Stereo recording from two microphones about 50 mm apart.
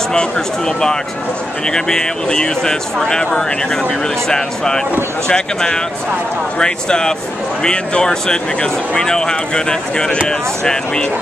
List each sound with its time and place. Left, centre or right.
0.1 s speech: centre
4.3 s speech: centre